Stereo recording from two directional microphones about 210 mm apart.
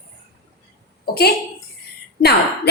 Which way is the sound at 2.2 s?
50° left (ahead or behind).